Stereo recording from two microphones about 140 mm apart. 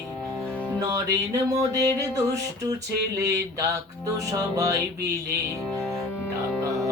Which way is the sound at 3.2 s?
25° right (ahead or behind).